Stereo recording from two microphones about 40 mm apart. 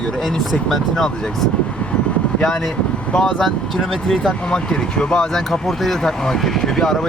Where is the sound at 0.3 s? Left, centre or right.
Centre.